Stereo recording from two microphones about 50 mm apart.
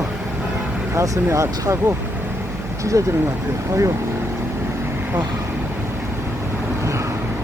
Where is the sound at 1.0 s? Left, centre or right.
Right.